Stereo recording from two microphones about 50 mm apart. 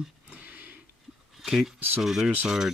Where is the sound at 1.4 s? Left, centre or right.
Centre.